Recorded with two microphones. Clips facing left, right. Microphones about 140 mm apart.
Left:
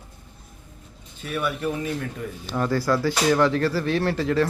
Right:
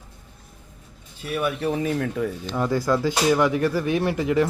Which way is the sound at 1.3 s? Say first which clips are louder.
Right 2 dB; 15° right (ahead or behind).